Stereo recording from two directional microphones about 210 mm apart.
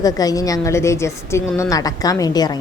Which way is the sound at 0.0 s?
15° left (ahead or behind).